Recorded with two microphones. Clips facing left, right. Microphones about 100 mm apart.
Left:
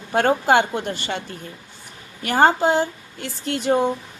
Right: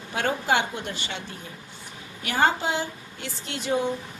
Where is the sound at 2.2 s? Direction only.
50° left (ahead or behind).